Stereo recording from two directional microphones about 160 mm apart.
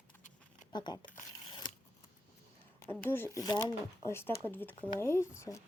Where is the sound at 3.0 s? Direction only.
15° left (ahead or behind).